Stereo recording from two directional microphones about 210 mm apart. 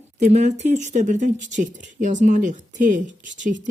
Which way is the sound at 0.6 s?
35° right (ahead or behind).